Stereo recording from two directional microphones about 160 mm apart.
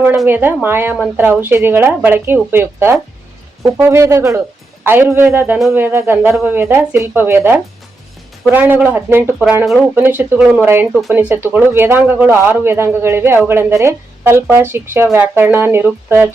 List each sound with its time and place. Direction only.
0.3 s speech: 10° right (ahead or behind)